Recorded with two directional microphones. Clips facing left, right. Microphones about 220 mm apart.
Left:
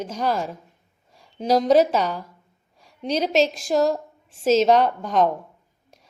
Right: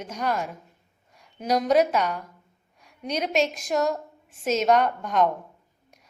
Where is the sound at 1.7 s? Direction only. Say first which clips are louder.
Left 2 dB; 30° left (ahead or behind).